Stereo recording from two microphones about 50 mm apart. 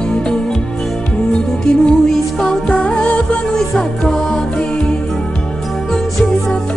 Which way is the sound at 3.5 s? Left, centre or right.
Centre.